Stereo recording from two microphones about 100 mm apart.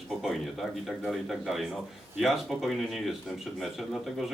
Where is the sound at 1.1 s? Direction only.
Centre (ahead or behind).